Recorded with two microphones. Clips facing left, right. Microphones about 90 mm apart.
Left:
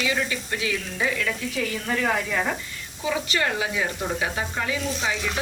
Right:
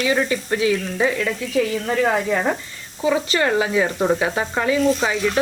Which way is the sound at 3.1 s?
40° right (ahead or behind).